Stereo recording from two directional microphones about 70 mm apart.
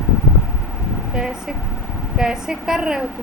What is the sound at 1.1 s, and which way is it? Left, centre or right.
A woman's voice, centre.